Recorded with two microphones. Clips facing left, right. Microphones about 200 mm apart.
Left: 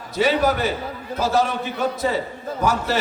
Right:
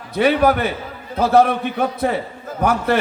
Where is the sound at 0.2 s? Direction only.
60° right (ahead or behind).